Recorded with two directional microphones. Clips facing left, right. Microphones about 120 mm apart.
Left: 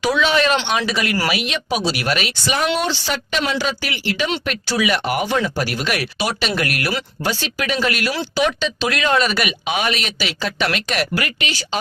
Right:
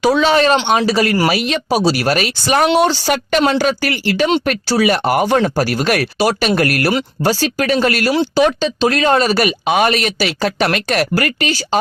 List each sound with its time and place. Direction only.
0.0 s speech: 35° right (ahead or behind)